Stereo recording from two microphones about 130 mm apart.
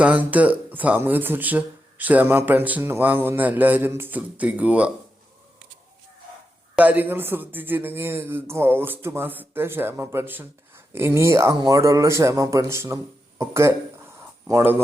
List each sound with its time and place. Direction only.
0.0 s speech: 10° right (ahead or behind)
6.7 s speech: 10° right (ahead or behind)